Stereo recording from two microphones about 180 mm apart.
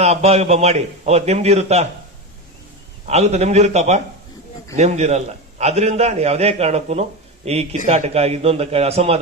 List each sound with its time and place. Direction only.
0.0 s a man's voice: 35° right (ahead or behind)
3.1 s a man's voice: 35° right (ahead or behind)